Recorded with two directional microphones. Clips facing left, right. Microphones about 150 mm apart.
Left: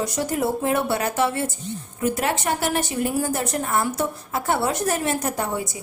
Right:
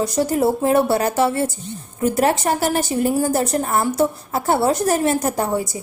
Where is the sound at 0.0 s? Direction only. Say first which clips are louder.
Right 6 dB; 35° right (ahead or behind).